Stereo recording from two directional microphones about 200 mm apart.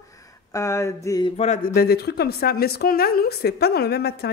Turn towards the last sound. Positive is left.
turn(degrees=55)  # may be behind; listen again after turning